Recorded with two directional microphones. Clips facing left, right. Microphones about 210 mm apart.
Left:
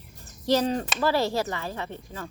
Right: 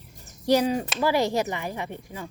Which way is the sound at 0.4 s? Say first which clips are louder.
Right 2 dB; 10° right (ahead or behind).